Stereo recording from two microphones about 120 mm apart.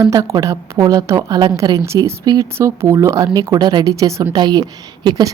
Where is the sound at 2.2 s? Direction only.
35° right (ahead or behind).